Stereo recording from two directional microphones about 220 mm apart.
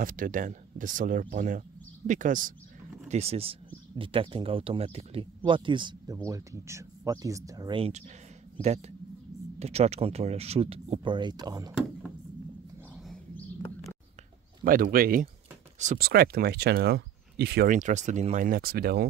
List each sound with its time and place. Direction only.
0.0 s speech: 40° right (ahead or behind); by 11.7 s 20° right (ahead or behind)
12.9 s bird: centre (ahead or behind)
14.6 s speech: 40° right (ahead or behind)